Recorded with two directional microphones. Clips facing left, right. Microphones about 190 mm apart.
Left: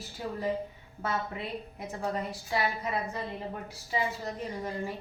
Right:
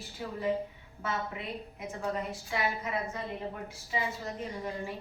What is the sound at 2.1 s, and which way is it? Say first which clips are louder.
Speech: left 2 dB; 35° left (ahead or behind).